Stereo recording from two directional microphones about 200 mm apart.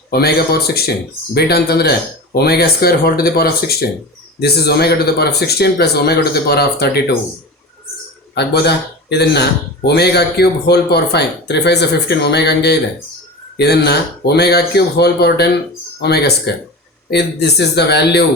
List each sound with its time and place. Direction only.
0.1 s speech: 50° left (ahead or behind)
8.4 s speech: 55° left (ahead or behind)